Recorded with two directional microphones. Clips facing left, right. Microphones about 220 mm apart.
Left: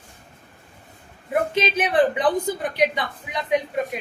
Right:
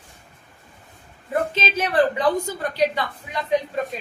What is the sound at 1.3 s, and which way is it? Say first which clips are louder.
A woman's voice: left 2 dB; 15° left (ahead or behind).